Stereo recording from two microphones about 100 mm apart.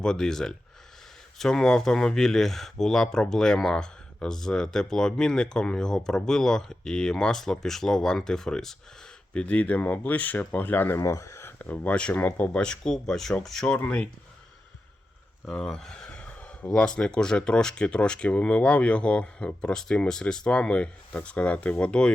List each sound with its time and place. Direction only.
0.0 s speech: 5° left (ahead or behind); by 11.5 s 30° left (ahead or behind)
11.6 s speech: 15° left (ahead or behind)
13.7 s speech: 15° left (ahead or behind)
15.4 s speech: 5° left (ahead or behind)